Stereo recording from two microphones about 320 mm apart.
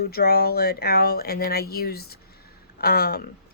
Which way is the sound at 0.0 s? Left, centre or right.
Left.